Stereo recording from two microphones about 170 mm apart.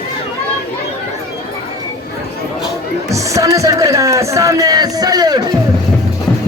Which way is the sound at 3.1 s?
20° right (ahead or behind).